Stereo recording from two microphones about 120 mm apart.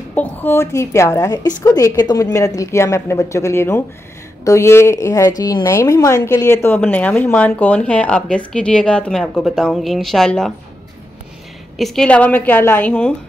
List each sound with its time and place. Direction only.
0.1 s a woman's voice: 15° left (ahead or behind)
11.8 s a woman's voice: 5° left (ahead or behind)